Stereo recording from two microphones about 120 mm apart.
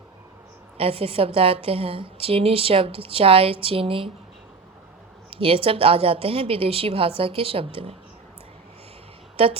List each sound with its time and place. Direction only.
0.8 s a woman's voice: 50° right (ahead or behind)
5.4 s a woman's voice: 50° right (ahead or behind)